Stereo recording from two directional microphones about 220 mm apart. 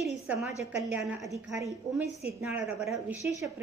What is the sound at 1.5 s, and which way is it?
A woman's voice, 15° right (ahead or behind).